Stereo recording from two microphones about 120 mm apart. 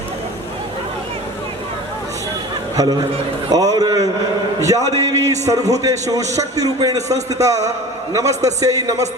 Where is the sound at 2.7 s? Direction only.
30° right (ahead or behind).